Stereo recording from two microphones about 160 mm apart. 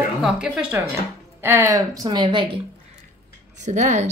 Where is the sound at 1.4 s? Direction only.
15° right (ahead or behind); by 2.6 s 30° right (ahead or behind).